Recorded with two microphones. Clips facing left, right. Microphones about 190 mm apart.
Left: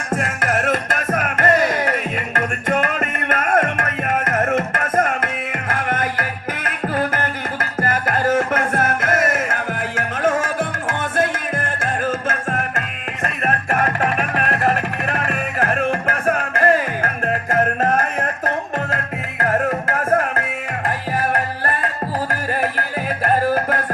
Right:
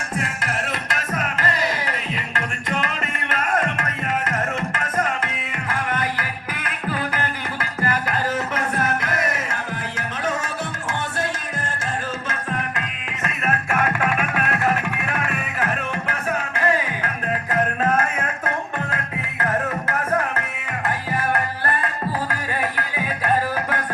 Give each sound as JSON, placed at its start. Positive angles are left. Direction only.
{"t": 0.1, "sound": "music", "side_deg": 50}